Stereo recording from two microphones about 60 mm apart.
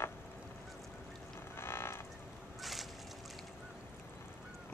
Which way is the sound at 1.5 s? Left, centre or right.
Left.